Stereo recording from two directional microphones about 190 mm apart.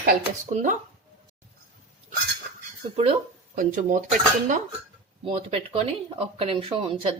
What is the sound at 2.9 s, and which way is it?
Speech, 35° right (ahead or behind).